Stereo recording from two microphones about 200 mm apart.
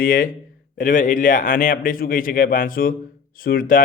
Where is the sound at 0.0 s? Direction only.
45° left (ahead or behind).